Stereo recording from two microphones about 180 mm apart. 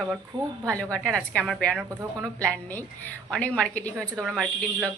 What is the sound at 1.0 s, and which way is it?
Speech, 5° left (ahead or behind).